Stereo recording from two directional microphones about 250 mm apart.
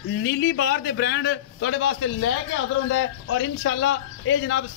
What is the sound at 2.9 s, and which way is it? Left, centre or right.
Speech, left.